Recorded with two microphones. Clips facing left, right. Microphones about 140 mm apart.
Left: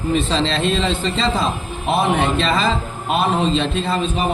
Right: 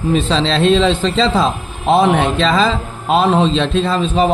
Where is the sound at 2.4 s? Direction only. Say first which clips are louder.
Right 4 dB; 90° right.